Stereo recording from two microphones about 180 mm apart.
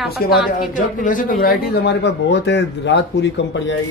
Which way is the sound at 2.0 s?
75° left (ahead or behind).